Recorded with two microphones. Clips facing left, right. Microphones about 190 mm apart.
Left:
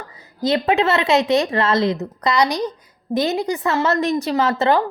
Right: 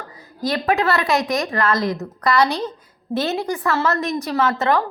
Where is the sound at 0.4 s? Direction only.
25° left (ahead or behind).